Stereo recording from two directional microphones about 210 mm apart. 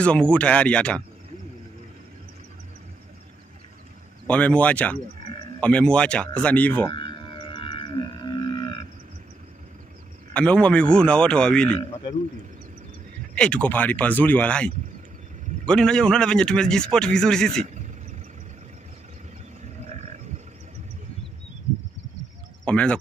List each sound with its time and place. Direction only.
0.0 s a man's voice: 5° left (ahead or behind)
4.3 s speech: 5° left (ahead or behind)
6.9 s whale vocalization: 20° left (ahead or behind)
10.3 s a man's voice: 5° left (ahead or behind)
13.3 s a man's voice: 5° left (ahead or behind)
22.7 s speech: 5° left (ahead or behind)